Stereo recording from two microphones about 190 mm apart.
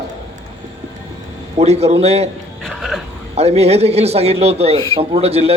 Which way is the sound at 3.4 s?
35° right (ahead or behind).